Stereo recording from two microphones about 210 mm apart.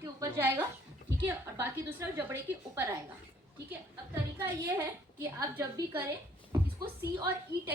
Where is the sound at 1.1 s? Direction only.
10° right (ahead or behind).